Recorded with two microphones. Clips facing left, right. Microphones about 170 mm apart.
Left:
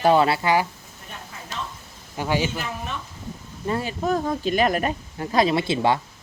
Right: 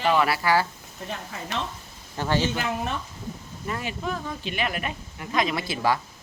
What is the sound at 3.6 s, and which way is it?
Speech, 30° left (ahead or behind).